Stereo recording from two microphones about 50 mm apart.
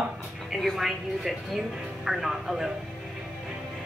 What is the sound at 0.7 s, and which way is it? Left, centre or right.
Speech, centre.